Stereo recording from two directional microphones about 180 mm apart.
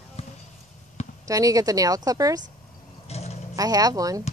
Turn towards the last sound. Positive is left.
turn(degrees=-20)  # may be behind; listen again after turning